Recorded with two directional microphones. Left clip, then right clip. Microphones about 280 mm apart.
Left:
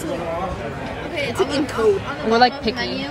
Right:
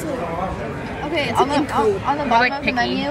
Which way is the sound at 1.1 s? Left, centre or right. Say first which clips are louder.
Right 3 dB; right.